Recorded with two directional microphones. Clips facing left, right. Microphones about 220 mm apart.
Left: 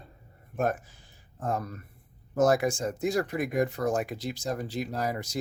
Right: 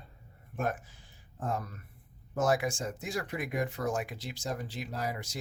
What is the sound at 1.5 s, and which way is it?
Speech, 40° left (ahead or behind).